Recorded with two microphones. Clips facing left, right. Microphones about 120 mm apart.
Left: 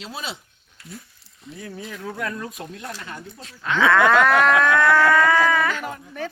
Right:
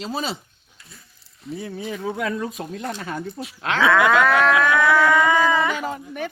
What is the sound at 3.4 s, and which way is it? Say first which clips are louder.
Speech: left 2 dB; 80° right.